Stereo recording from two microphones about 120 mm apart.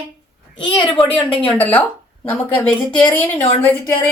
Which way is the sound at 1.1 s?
50° left (ahead or behind).